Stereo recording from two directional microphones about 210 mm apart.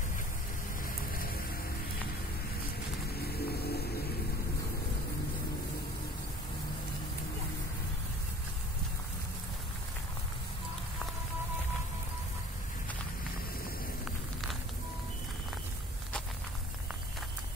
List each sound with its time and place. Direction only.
0.8 s music: 45° left (ahead or behind)
3.1 s music: 50° left (ahead or behind)